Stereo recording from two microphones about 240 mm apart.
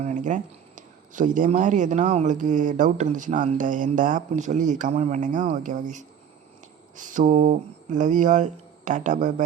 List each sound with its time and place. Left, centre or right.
0.0 s speech: right